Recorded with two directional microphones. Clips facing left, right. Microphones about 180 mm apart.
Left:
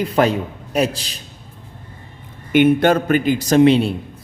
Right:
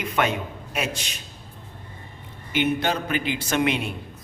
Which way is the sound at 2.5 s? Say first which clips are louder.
Left 10 dB; 50° left (ahead or behind).